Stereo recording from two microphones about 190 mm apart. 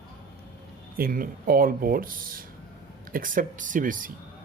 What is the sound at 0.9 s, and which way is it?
Speech, 50° right (ahead or behind).